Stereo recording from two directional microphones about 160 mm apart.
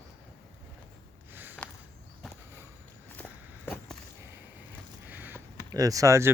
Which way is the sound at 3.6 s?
10° left (ahead or behind).